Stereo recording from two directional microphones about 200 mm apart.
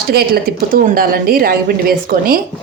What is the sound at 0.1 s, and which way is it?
A woman's voice, 50° right (ahead or behind).